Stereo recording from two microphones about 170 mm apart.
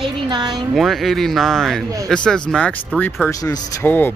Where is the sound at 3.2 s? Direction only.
20° left (ahead or behind).